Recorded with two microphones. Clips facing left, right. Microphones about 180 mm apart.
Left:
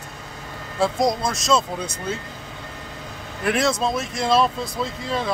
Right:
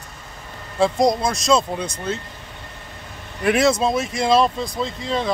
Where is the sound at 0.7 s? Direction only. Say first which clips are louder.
Right 3 dB; 5° left (ahead or behind).